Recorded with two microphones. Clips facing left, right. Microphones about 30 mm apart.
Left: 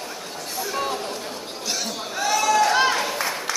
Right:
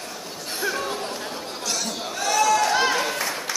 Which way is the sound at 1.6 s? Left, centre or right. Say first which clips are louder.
Even; centre.